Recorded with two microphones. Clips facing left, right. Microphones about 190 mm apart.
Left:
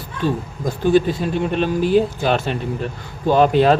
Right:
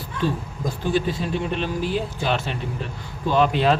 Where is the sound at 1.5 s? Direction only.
50° left (ahead or behind).